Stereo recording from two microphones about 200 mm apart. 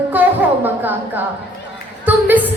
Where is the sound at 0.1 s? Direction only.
10° right (ahead or behind).